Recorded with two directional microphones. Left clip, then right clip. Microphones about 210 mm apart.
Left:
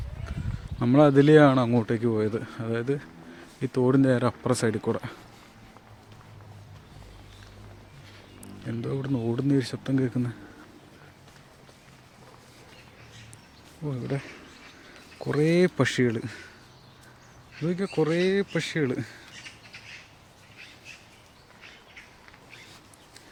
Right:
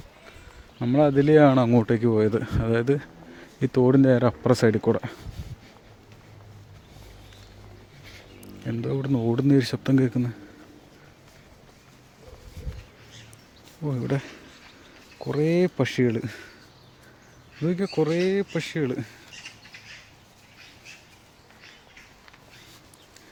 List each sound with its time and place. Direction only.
0.8 s speech: 5° left (ahead or behind); by 5.1 s 20° right (ahead or behind)
8.6 s speech: 15° right (ahead or behind)
13.8 s speech: 25° right (ahead or behind)
15.2 s speech: centre (ahead or behind)
17.6 s speech: 15° right (ahead or behind)